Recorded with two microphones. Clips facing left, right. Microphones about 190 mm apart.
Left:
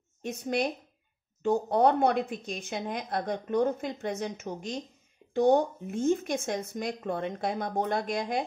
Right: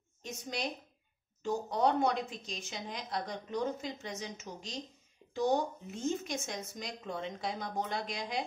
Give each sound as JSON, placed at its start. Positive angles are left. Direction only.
{"t": 0.2, "sound": "a woman's voice", "side_deg": 55}